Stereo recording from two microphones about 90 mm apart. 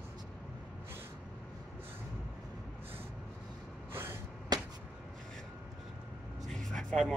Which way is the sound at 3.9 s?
25° right (ahead or behind).